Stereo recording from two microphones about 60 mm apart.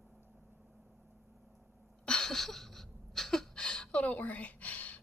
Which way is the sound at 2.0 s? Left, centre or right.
Centre.